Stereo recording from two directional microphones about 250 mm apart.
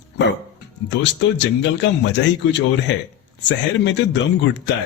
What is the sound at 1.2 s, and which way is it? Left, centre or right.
Speech, left.